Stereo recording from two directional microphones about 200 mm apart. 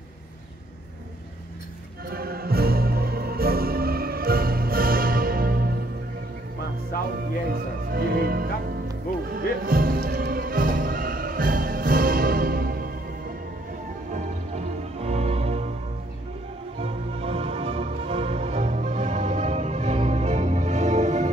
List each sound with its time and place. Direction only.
2.0 s music: 50° right (ahead or behind)
6.9 s music: 45° left (ahead or behind)
7.5 s speech: 50° right (ahead or behind)
9.3 s music: 45° right (ahead or behind)
14.1 s music: 35° right (ahead or behind)
16.8 s music: 30° right (ahead or behind)